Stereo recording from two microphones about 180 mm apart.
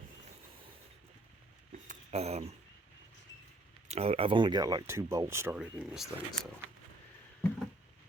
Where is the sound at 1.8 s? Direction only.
40° right (ahead or behind).